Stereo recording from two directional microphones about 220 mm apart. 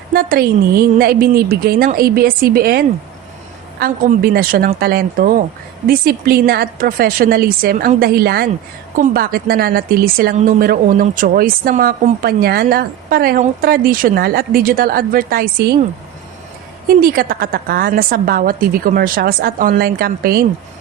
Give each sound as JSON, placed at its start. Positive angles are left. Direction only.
{"t": 0.1, "sound": "a woman's voice", "side_deg": -45}
{"t": 17.0, "sound": "a woman's voice", "side_deg": -40}